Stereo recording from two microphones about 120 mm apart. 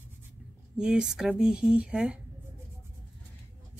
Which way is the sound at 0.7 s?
5° right (ahead or behind).